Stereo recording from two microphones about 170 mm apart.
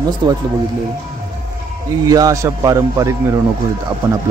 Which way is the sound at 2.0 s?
20° right (ahead or behind).